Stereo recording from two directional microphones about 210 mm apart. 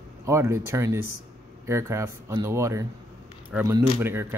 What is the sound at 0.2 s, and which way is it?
Speech, 15° right (ahead or behind).